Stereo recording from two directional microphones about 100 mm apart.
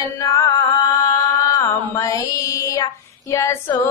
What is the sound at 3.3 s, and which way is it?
Female singing, 30° left (ahead or behind).